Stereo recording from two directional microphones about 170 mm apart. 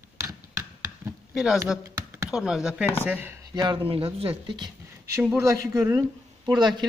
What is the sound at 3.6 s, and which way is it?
Speech, 25° right (ahead or behind).